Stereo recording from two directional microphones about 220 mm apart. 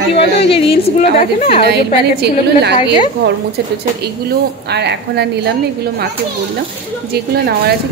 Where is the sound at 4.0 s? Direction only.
50° right (ahead or behind).